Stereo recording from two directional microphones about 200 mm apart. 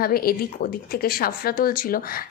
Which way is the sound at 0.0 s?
50° left (ahead or behind).